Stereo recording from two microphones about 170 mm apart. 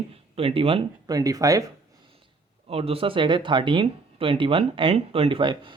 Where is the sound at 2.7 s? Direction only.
35° right (ahead or behind).